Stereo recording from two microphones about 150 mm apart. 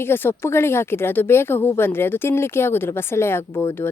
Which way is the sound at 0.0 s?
15° left (ahead or behind).